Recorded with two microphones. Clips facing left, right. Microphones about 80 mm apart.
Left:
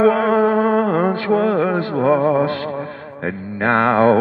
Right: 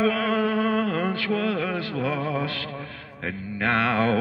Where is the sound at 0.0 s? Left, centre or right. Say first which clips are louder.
Left 9 dB; left.